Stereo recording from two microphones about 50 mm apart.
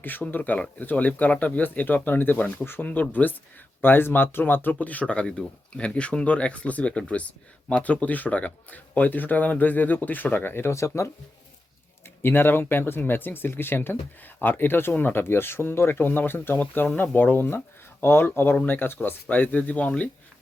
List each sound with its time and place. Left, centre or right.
0.0 s speech: left
10.7 s speech: left
12.2 s speech: left
18.0 s speech: left